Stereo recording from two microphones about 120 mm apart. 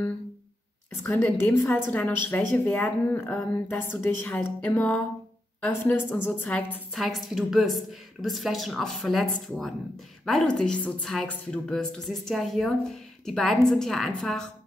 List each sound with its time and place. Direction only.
1.0 s a woman's voice: 15° left (ahead or behind)
7.0 s speech: centre (ahead or behind)